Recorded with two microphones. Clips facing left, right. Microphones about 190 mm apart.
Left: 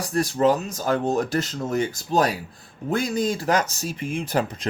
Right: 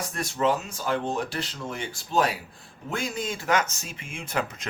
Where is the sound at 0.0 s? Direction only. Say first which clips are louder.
Left 6 dB; 35° left (ahead or behind).